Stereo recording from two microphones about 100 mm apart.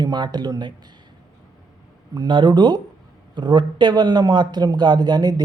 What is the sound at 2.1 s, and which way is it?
A man's voice, 45° right (ahead or behind).